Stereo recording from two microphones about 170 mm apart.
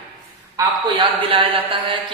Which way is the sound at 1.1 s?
30° right (ahead or behind).